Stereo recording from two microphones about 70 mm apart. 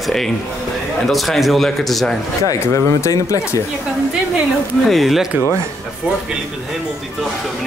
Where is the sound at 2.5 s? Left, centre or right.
Left.